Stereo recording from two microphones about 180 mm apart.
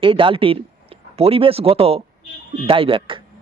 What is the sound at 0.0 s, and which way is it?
Speech, 30° right (ahead or behind).